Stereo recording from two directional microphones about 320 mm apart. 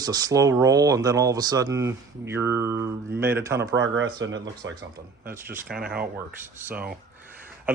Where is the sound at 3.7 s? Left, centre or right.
Right.